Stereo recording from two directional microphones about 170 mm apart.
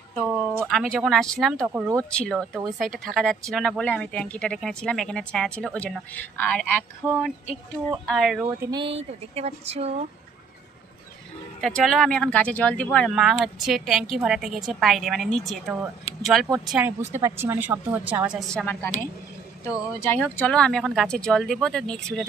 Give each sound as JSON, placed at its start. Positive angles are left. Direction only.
{"t": 0.1, "sound": "speech", "side_deg": -5}
{"t": 1.6, "sound": "speech", "side_deg": -15}
{"t": 2.0, "sound": "speech", "side_deg": 5}
{"t": 7.0, "sound": "speech", "side_deg": -10}
{"t": 7.9, "sound": "speech", "side_deg": 0}
{"t": 8.5, "sound": "speech", "side_deg": -25}
{"t": 11.6, "sound": "speech", "side_deg": 0}
{"t": 20.0, "sound": "speech", "side_deg": 10}